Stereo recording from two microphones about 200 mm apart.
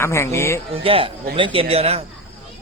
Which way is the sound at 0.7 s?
30° right (ahead or behind).